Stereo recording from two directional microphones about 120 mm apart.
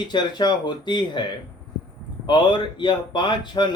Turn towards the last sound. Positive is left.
turn(degrees=40)  # may be behind; listen again after turning